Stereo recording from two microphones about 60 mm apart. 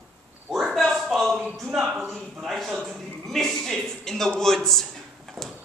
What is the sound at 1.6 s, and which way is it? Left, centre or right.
A man's voice, centre.